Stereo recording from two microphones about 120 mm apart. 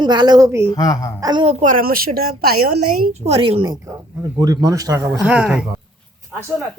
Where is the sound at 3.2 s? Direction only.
55° right (ahead or behind).